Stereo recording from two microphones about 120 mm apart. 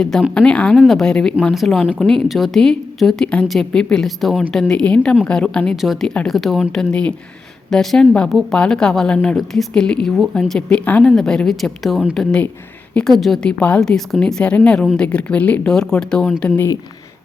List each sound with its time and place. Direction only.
0.0 s speech: 5° left (ahead or behind)